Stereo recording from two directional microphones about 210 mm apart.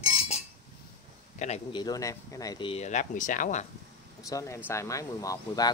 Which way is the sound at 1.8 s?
15° left (ahead or behind).